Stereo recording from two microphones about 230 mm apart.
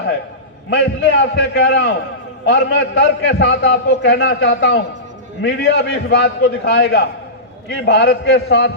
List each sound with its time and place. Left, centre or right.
0.7 s a man's voice: left